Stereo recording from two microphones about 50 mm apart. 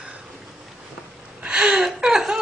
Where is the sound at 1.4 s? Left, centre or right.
Centre.